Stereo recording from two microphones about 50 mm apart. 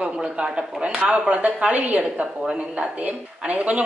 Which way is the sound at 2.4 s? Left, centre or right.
Centre.